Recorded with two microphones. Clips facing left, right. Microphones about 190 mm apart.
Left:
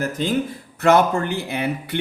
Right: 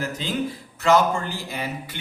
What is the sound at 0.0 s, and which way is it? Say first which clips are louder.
Speech: left 5 dB; 50° left (ahead or behind).